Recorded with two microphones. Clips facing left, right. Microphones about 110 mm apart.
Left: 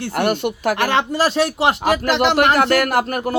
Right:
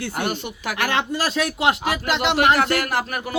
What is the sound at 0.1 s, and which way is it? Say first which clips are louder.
Speech: left 7 dB; 60° left (ahead or behind).